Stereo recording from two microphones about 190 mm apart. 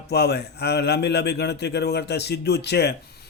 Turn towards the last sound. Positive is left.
turn(degrees=60)  # may be behind; listen again after turning